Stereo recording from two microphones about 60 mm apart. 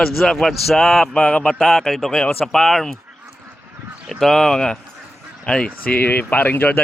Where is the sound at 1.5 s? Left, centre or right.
Centre.